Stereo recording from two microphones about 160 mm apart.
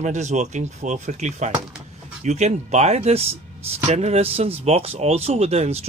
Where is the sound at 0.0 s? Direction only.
45° right (ahead or behind).